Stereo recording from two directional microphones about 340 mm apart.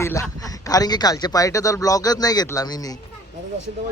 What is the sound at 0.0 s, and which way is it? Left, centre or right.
A man's voice, centre.